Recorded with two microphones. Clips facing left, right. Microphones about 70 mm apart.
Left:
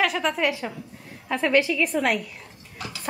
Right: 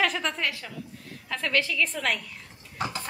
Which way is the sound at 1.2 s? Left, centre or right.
Left.